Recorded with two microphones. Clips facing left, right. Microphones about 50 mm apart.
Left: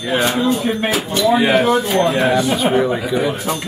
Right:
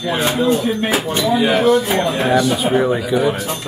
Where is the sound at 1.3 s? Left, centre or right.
Centre.